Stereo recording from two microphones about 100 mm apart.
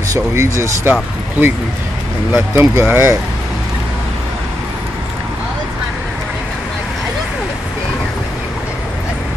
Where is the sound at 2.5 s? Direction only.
25° right (ahead or behind).